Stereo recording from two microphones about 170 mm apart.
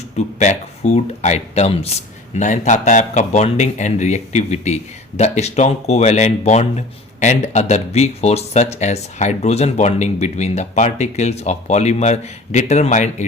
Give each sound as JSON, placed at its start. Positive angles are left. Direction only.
{"t": 0.3, "sound": "speech", "side_deg": 45}